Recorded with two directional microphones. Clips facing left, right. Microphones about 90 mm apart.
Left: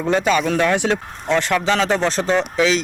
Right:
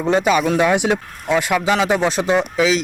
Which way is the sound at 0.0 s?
15° right (ahead or behind).